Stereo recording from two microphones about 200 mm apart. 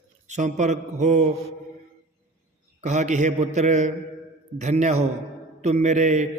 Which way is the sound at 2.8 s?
35° right (ahead or behind).